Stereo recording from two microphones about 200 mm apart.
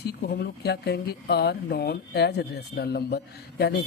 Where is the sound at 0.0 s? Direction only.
55° left (ahead or behind).